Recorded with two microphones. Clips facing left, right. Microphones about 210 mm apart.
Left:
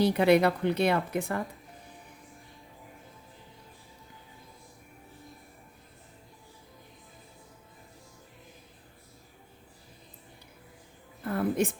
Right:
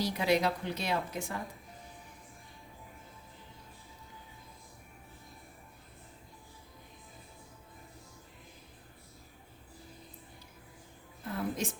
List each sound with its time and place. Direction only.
0.0 s speech: 60° left (ahead or behind)
11.2 s music: 60° left (ahead or behind)